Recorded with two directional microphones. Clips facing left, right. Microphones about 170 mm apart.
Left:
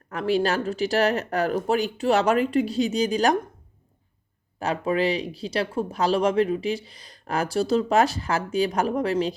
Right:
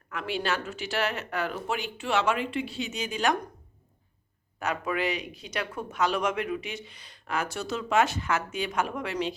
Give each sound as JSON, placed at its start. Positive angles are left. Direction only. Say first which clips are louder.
{"t": 0.1, "sound": "speech", "louder": "left 8 dB", "side_deg": 40}
{"t": 4.6, "sound": "speech", "louder": "left 6 dB", "side_deg": 30}